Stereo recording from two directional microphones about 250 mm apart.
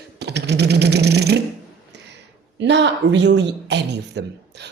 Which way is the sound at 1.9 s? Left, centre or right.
Right.